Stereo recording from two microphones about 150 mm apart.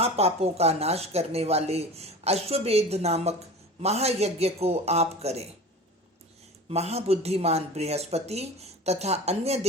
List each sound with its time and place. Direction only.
0.0 s speech: 45° right (ahead or behind)
6.7 s speech: 45° right (ahead or behind)